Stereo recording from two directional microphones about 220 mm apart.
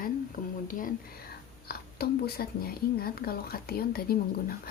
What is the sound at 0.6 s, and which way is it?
Speech, 40° left (ahead or behind).